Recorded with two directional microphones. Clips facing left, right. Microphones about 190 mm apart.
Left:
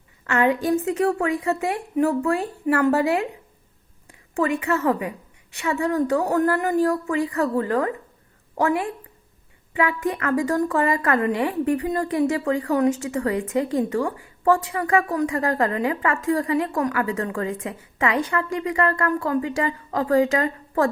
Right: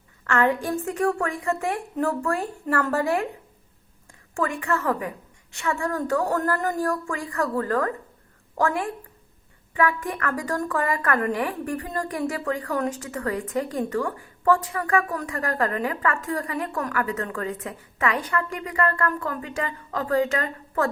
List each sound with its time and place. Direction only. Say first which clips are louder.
0.3 s a woman's voice: left 3 dB; 20° left (ahead or behind)
4.4 s a woman's voice: left 4 dB; 20° left (ahead or behind)